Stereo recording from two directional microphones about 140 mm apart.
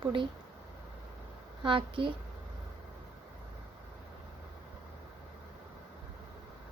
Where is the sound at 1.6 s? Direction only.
40° right (ahead or behind).